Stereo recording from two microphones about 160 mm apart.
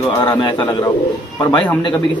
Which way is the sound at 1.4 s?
25° left (ahead or behind).